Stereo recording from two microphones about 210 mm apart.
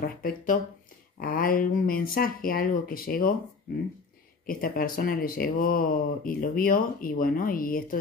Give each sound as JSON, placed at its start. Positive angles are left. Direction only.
{"t": 0.0, "sound": "speech", "side_deg": 45}
{"t": 4.5, "sound": "speech", "side_deg": 45}